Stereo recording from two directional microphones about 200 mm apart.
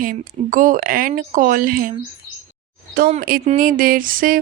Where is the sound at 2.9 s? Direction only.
45° right (ahead or behind).